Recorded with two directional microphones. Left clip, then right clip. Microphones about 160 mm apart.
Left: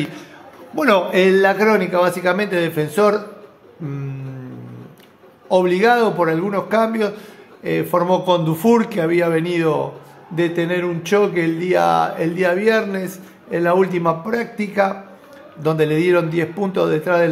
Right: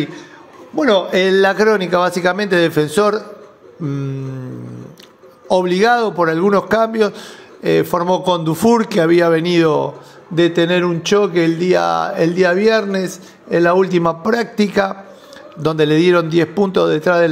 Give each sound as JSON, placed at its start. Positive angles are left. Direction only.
{"t": 1.1, "sound": "speech", "side_deg": -35}
{"t": 3.8, "sound": "mantra", "side_deg": -25}
{"t": 5.5, "sound": "speech", "side_deg": -40}